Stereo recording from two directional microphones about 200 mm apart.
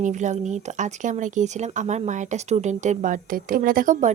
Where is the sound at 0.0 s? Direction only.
40° right (ahead or behind).